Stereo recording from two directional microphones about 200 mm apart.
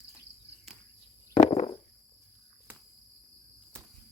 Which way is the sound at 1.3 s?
35° left (ahead or behind).